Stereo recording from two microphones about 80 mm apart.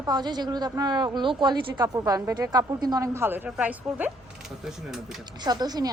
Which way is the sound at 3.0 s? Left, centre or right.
Right.